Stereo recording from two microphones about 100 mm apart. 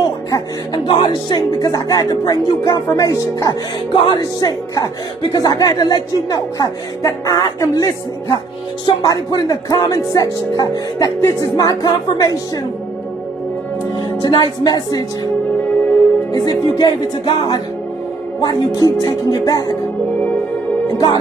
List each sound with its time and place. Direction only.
0.8 s speech: 45° left (ahead or behind)
13.9 s speech: 40° left (ahead or behind)
16.3 s music: 40° left (ahead or behind)
18.4 s speech: 40° left (ahead or behind)
20.8 s music: 45° left (ahead or behind)